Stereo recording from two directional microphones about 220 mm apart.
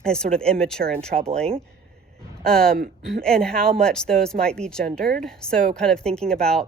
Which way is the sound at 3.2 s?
5° left (ahead or behind).